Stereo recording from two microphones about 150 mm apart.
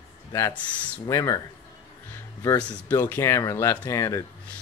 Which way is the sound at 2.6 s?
10° left (ahead or behind).